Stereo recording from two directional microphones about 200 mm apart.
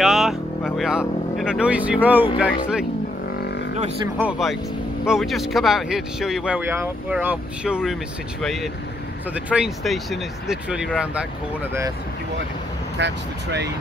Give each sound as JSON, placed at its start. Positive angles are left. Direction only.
{"t": 0.0, "sound": "speech", "side_deg": 0}
{"t": 4.2, "sound": "speech", "side_deg": -5}
{"t": 12.9, "sound": "speech", "side_deg": -60}